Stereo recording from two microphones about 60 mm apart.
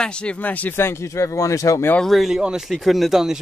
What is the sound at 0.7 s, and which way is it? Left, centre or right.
Speech, left.